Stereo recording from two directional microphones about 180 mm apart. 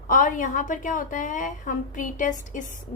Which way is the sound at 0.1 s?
45° left (ahead or behind).